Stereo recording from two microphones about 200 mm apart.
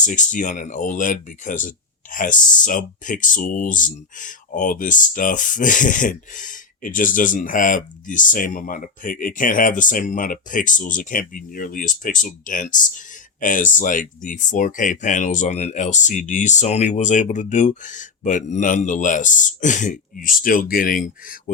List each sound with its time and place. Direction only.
0.0 s speech: 40° left (ahead or behind)